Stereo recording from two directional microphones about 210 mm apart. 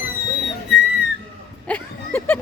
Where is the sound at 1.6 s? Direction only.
10° left (ahead or behind).